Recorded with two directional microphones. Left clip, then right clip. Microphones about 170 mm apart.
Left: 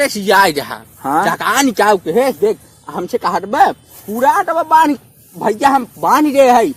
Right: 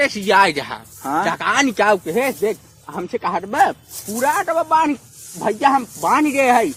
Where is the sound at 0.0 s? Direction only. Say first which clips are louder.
Left 3 dB; 20° left (ahead or behind).